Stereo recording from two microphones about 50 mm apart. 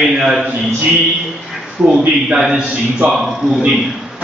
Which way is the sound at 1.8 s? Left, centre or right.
Right.